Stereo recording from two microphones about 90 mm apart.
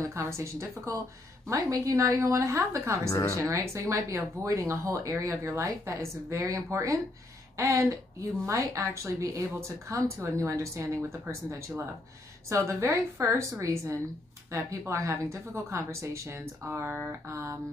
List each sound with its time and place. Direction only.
0.0 s speech: 30° right (ahead or behind)